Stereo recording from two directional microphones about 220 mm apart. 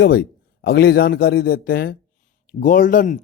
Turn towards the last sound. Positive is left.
turn(degrees=35)  # may be behind; listen again after turning